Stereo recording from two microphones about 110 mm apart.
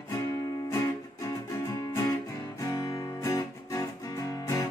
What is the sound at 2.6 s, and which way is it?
Music, 35° left (ahead or behind).